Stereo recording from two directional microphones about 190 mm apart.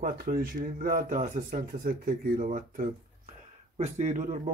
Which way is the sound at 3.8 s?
35° right (ahead or behind).